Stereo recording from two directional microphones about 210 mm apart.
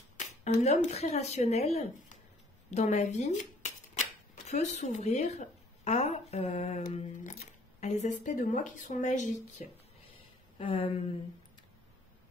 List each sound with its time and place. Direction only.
0.4 s speech: 30° left (ahead or behind)
10.6 s speech: 25° left (ahead or behind)